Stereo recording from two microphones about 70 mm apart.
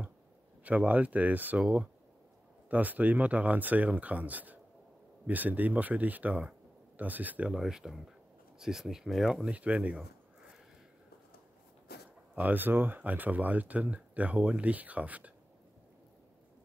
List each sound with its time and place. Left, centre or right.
0.7 s speech: right
7.5 s speech: centre
9.5 s speech: centre
12.4 s speech: right